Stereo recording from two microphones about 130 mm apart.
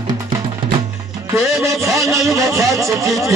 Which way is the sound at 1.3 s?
20° right (ahead or behind).